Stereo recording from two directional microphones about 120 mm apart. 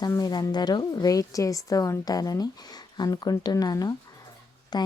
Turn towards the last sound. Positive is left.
turn(degrees=35)  # may be behind; listen again after turning